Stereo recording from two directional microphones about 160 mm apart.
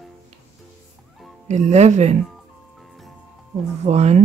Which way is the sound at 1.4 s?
45° right (ahead or behind).